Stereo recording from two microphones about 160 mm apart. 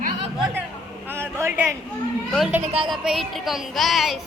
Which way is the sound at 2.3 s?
Centre (ahead or behind).